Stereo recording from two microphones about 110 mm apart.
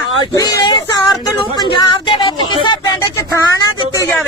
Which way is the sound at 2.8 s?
25° left (ahead or behind).